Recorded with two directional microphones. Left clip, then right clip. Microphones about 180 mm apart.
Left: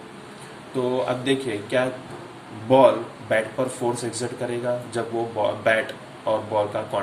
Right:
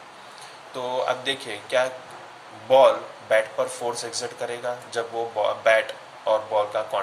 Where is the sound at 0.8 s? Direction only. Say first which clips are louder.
Left 1 dB; 15° right (ahead or behind).